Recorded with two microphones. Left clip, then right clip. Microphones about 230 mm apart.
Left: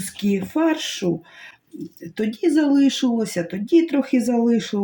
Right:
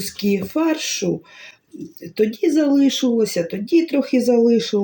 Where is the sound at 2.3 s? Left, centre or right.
Centre.